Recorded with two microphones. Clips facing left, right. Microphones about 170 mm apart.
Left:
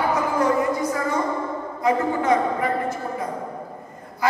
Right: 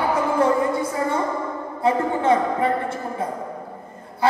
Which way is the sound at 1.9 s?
30° right (ahead or behind).